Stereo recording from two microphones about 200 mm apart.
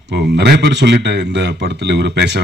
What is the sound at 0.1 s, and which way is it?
Speech, 55° right (ahead or behind).